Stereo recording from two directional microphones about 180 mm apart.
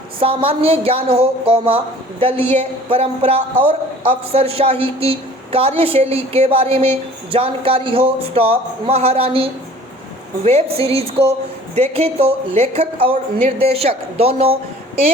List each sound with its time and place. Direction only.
0.2 s a woman's voice: 30° right (ahead or behind)